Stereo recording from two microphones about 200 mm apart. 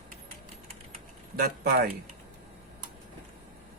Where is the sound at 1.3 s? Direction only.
50° right (ahead or behind).